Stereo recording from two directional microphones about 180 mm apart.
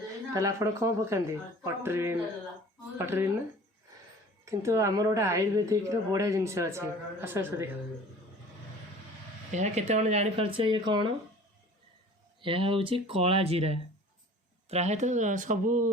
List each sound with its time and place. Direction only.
0.3 s a woman's voice: 15° right (ahead or behind)
4.4 s a woman's voice: 15° right (ahead or behind)
9.5 s speech: 40° right (ahead or behind)
12.4 s speech: 30° right (ahead or behind); by 15.9 s 45° right (ahead or behind)